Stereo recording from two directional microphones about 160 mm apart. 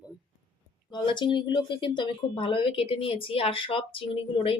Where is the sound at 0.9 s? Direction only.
30° left (ahead or behind).